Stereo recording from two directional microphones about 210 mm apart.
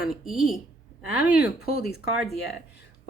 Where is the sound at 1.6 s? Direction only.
45° left (ahead or behind).